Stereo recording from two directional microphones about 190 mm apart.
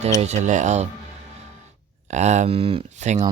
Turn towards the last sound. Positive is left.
turn(degrees=-35)  # may be behind; listen again after turning